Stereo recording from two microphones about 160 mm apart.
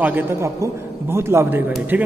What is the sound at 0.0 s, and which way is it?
A man's voice, 10° right (ahead or behind).